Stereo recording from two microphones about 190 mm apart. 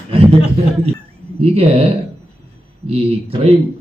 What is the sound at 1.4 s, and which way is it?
Speech, 30° right (ahead or behind).